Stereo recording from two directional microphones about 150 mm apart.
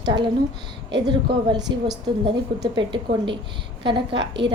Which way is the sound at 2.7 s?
35° right (ahead or behind).